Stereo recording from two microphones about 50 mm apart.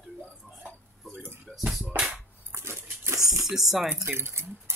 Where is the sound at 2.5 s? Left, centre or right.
Right.